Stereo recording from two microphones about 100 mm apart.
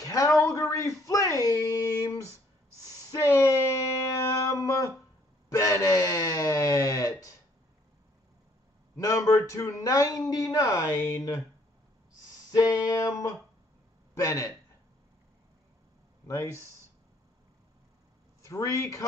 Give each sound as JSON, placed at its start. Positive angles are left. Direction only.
{"t": 0.0, "sound": "a sound", "side_deg": 35}
{"t": 5.5, "sound": "wail", "side_deg": 35}
{"t": 8.9, "sound": "a sound", "side_deg": 35}
{"t": 12.4, "sound": "music", "side_deg": 40}
{"t": 14.1, "sound": "speech", "side_deg": 35}
{"t": 16.3, "sound": "speech", "side_deg": 30}
{"t": 18.4, "sound": "speech", "side_deg": 30}